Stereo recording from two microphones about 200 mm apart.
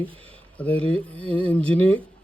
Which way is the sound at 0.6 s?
5° left (ahead or behind).